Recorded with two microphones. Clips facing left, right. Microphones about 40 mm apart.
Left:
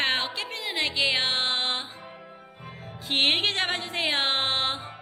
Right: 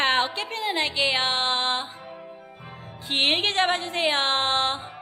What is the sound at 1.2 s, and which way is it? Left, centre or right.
Music, centre.